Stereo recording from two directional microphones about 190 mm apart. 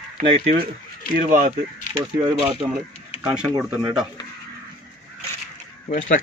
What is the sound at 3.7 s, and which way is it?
Speech, 5° right (ahead or behind).